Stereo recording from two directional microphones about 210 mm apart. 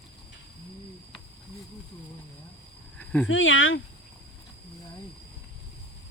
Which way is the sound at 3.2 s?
65° left (ahead or behind).